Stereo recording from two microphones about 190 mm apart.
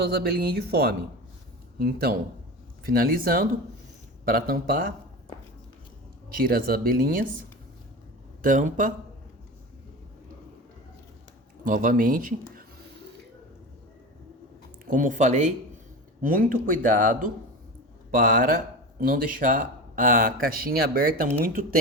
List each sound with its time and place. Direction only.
0.0 s speech: 55° right (ahead or behind)
6.4 s speech: 50° right (ahead or behind)
8.4 s speech: 45° right (ahead or behind)
11.6 s speech: 45° right (ahead or behind)
14.8 s speech: 45° right (ahead or behind)